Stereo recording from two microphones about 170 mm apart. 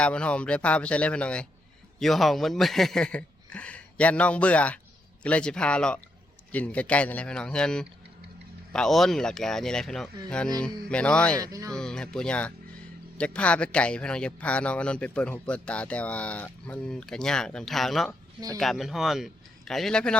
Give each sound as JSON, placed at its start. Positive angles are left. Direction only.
{"t": 0.0, "sound": "a man's voice", "side_deg": 5}
{"t": 11.3, "sound": "speech", "side_deg": -20}
{"t": 11.7, "sound": "a man's voice", "side_deg": 5}